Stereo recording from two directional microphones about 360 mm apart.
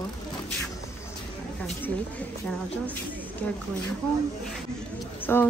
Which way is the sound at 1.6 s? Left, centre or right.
Centre.